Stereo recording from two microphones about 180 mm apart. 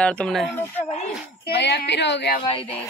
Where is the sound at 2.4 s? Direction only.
30° left (ahead or behind).